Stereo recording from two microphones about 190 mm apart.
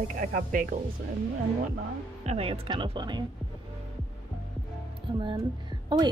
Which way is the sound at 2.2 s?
30° right (ahead or behind).